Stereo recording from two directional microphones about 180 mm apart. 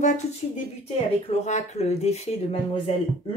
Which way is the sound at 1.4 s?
40° left (ahead or behind).